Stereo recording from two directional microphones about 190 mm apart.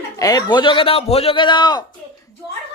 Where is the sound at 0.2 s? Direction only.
20° left (ahead or behind).